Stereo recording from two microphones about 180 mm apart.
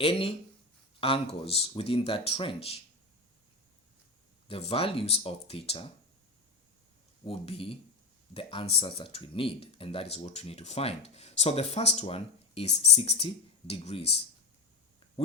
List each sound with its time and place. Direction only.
0.0 s speech: 30° left (ahead or behind)
4.4 s speech: 30° left (ahead or behind)
7.3 s speech: 30° left (ahead or behind)